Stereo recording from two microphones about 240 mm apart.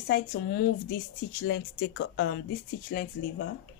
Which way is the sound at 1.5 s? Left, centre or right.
Left.